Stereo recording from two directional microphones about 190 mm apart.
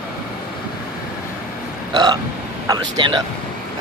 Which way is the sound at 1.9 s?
20° right (ahead or behind).